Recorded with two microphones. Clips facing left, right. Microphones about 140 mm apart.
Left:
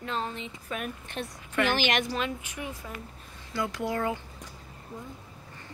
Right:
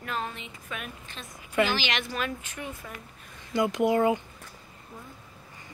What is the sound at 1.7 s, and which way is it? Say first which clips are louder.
Speech: left 3 dB; 50° left (ahead or behind).